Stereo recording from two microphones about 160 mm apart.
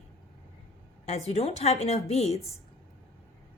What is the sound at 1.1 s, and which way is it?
A woman's voice, 40° left (ahead or behind).